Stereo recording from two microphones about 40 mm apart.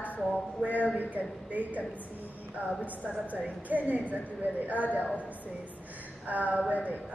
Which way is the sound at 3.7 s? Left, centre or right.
Right.